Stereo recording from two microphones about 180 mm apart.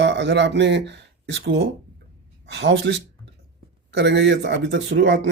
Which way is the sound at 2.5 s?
70° right (ahead or behind).